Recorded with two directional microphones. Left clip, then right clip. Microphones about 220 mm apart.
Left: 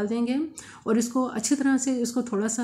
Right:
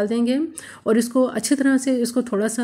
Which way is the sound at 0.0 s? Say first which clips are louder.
Right 6 dB; 15° right (ahead or behind).